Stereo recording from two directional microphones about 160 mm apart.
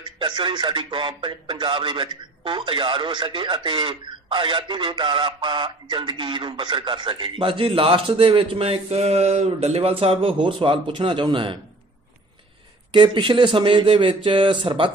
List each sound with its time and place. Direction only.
0.0 s speech: 30° right (ahead or behind)
12.9 s speech: 30° right (ahead or behind)